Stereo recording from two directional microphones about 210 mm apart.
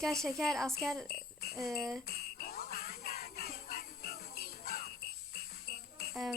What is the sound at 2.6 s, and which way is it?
Music, 45° left (ahead or behind).